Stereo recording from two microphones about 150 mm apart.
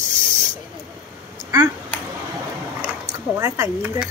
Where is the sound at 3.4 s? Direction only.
20° right (ahead or behind).